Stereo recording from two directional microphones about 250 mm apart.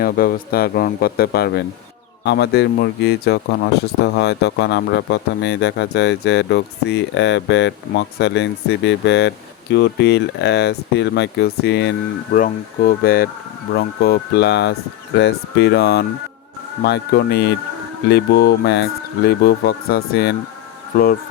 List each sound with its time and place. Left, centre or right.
0.0 s speech: left